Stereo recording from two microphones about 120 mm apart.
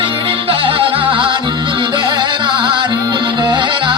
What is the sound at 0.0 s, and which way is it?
Music, 50° right (ahead or behind).